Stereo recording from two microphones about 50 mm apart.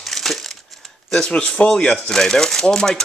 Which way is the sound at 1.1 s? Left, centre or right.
Centre.